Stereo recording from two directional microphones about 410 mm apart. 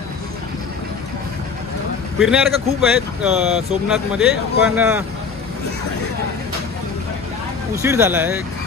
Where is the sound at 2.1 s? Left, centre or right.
Centre.